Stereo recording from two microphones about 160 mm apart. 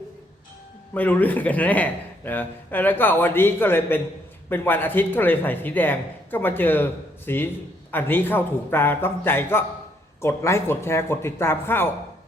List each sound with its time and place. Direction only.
0.9 s speech: 10° left (ahead or behind)